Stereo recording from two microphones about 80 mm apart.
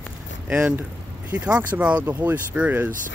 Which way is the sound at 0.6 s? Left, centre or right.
Right.